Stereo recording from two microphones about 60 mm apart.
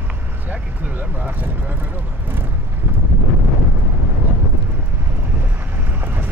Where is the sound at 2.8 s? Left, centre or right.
Right.